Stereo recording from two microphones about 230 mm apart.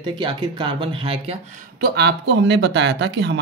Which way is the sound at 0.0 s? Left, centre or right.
Centre.